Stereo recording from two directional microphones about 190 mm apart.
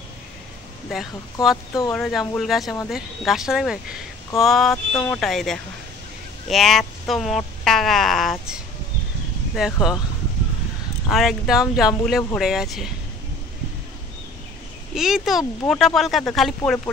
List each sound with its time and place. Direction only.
0.8 s speech: centre (ahead or behind)
1.7 s speech: 20° left (ahead or behind)
2.0 s speech: centre (ahead or behind)
9.6 s speech: centre (ahead or behind)
11.1 s speech: centre (ahead or behind)
15.0 s speech: centre (ahead or behind)